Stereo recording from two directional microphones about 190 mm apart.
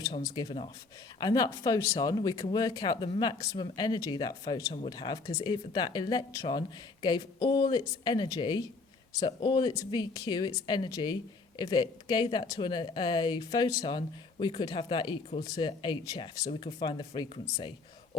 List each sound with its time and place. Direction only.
0.0 s speech: 20° left (ahead or behind)